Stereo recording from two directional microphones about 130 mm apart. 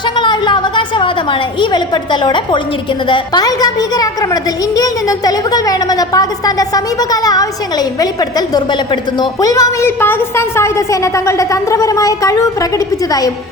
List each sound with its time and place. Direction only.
0.2 s a woman's voice: 35° left (ahead or behind)